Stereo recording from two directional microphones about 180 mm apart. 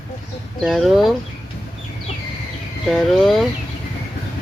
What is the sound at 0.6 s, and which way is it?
Speech, centre (ahead or behind).